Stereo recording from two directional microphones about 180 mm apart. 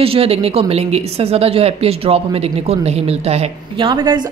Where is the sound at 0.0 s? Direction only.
30° right (ahead or behind).